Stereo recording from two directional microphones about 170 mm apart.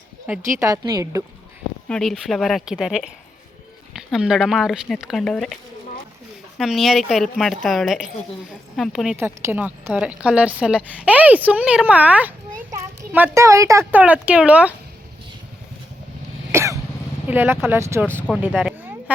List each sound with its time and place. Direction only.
0.3 s a woman's voice: 20° right (ahead or behind)
1.9 s speech: centre (ahead or behind)
6.6 s speech: centre (ahead or behind)
9.1 s a woman's voice: 15° right (ahead or behind)
14.0 s a woman's voice: 5° right (ahead or behind)
16.5 s cough: 15° right (ahead or behind)
17.2 s a woman's voice: 10° right (ahead or behind)
18.5 s a sound: 5° right (ahead or behind)